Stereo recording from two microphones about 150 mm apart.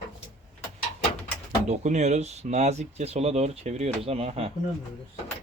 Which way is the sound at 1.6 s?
50° right (ahead or behind).